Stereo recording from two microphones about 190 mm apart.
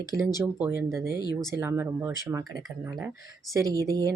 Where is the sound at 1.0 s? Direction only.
55° left (ahead or behind).